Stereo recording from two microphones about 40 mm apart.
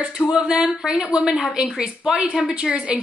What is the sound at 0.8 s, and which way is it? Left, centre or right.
Speech, centre.